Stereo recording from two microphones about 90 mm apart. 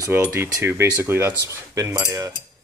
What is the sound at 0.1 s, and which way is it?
Speech, 25° right (ahead or behind).